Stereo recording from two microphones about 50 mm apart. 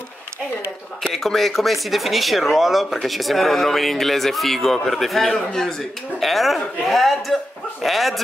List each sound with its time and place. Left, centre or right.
1.1 s speech: centre